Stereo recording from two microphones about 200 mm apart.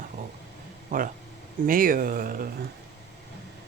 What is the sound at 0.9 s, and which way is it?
Speech, 45° right (ahead or behind).